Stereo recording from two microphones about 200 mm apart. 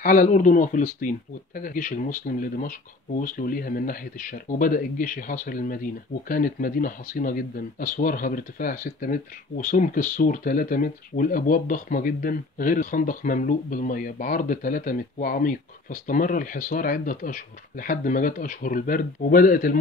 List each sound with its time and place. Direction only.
0.0 s speech: 40° left (ahead or behind)